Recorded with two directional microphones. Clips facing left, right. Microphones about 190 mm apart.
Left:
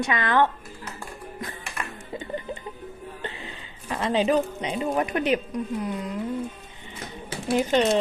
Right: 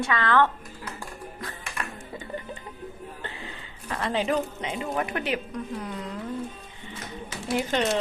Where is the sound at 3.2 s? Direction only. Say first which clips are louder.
Left 3 dB; 20° left (ahead or behind).